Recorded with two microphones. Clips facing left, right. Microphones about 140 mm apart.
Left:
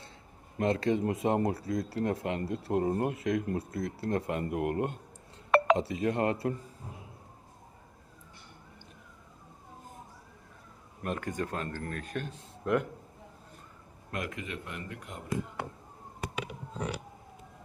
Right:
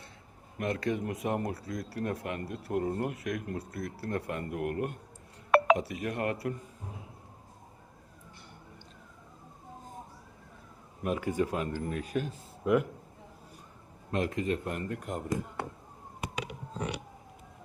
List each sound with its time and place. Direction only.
0.6 s speech: 25° left (ahead or behind)
5.5 s chink: 5° right (ahead or behind)
5.7 s speech: 25° left (ahead or behind)
11.0 s speech: 5° right (ahead or behind)
14.1 s speech: 30° right (ahead or behind)